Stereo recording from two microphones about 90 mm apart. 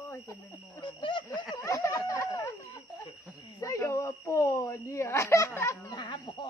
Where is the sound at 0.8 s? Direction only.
60° left (ahead or behind).